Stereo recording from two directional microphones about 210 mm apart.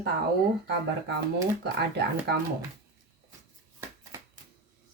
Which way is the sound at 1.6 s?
50° right (ahead or behind).